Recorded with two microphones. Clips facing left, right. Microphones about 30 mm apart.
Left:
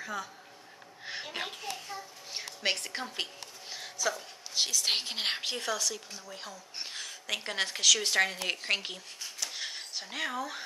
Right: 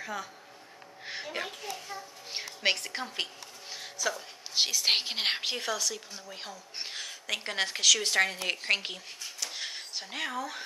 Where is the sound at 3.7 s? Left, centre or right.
Centre.